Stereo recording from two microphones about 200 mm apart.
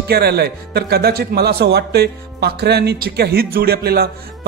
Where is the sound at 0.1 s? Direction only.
55° right (ahead or behind).